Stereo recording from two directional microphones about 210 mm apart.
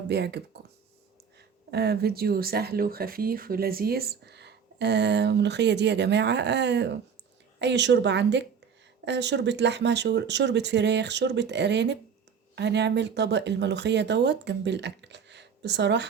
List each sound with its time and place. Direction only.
0.1 s speech: 50° right (ahead or behind)
1.7 s speech: 50° right (ahead or behind)